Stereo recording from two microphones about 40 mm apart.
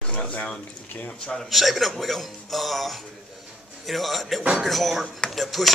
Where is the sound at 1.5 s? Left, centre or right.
Centre.